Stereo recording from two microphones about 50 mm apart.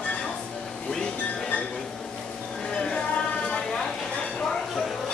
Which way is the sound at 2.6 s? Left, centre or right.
Centre.